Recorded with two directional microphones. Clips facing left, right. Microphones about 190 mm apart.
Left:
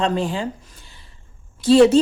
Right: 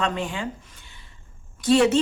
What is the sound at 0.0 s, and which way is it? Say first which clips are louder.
A woman's voice: left 5 dB; 35° left (ahead or behind).